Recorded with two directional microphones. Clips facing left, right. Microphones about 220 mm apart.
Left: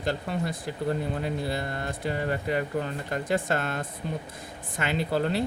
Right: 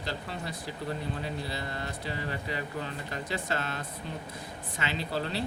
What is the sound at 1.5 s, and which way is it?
Speech, 50° left (ahead or behind).